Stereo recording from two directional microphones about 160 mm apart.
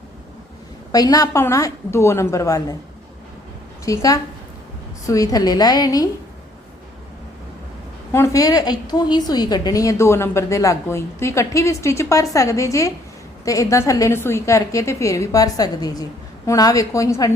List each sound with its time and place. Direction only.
0.9 s a woman's voice: 25° left (ahead or behind)
3.8 s a woman's voice: 20° left (ahead or behind)
8.1 s a woman's voice: 20° left (ahead or behind)